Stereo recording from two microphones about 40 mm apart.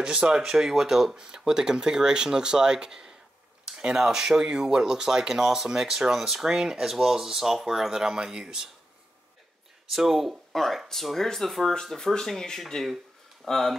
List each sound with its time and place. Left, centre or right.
0.0 s speech: centre
9.8 s speech: centre
10.5 s speech: centre